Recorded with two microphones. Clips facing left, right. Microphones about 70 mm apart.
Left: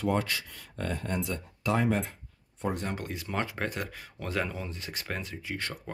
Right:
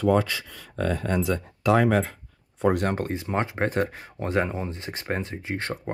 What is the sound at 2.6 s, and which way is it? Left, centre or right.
Speech, right.